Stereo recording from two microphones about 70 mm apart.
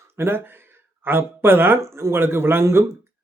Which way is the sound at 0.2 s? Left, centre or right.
Right.